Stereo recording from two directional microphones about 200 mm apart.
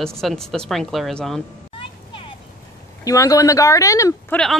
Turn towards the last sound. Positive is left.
turn(degrees=0)  # may be behind; listen again after turning